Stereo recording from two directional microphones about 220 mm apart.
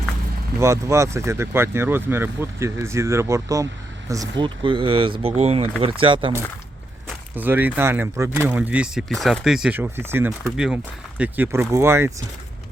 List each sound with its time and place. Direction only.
0.6 s speech: 15° right (ahead or behind)
7.1 s speech: 10° right (ahead or behind)